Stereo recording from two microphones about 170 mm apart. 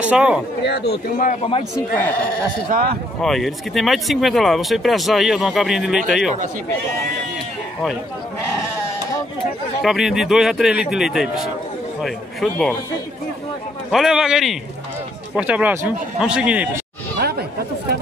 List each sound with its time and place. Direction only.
0.0 s speech: 5° right (ahead or behind)
0.7 s a man's voice: 70° left (ahead or behind)
1.1 s a man's voice: 55° left (ahead or behind)
2.7 s speech: 60° right (ahead or behind)
3.2 s speech: centre (ahead or behind)
9.8 s speech: centre (ahead or behind)
13.8 s speech: 5° right (ahead or behind)
17.2 s chatter: 70° right (ahead or behind)